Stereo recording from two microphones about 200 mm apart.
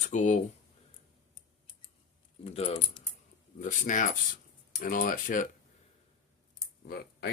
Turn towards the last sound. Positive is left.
turn(degrees=50)  # may be behind; listen again after turning